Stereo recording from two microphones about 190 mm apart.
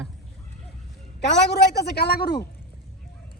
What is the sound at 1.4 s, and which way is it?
Speech, 60° left (ahead or behind).